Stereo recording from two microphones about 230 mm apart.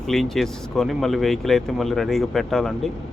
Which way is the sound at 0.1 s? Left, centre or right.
Centre.